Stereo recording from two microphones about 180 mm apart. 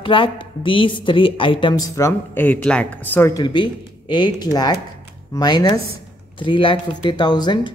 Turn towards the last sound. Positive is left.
turn(degrees=25)  # may be behind; listen again after turning